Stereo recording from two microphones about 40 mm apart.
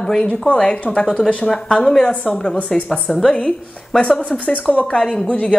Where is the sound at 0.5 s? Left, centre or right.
Left.